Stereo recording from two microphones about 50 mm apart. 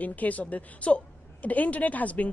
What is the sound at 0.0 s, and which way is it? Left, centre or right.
A woman's voice, left.